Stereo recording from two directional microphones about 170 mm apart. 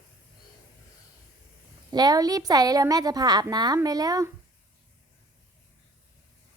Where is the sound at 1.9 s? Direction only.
25° right (ahead or behind).